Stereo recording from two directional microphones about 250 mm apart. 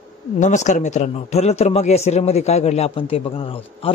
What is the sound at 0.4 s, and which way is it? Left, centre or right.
Speech, left.